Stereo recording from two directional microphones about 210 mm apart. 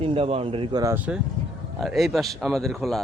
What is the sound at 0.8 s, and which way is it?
Speech, 10° right (ahead or behind).